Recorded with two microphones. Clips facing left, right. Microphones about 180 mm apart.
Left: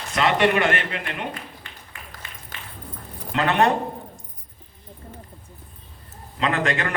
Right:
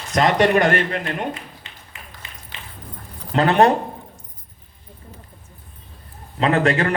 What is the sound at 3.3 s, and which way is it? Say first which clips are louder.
Speech: right 5 dB; 35° right (ahead or behind).